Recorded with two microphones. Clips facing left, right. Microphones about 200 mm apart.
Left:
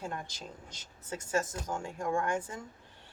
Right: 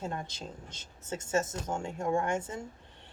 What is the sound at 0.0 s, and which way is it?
Speech, 25° right (ahead or behind).